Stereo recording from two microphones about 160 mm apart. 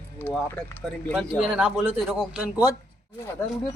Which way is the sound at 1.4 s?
5° right (ahead or behind).